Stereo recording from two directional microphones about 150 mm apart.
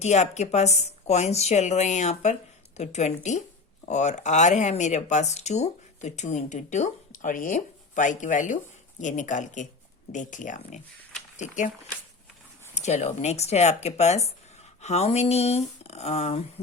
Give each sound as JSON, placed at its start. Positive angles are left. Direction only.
{"t": 0.0, "sound": "speech", "side_deg": 50}
{"t": 12.7, "sound": "speech", "side_deg": 50}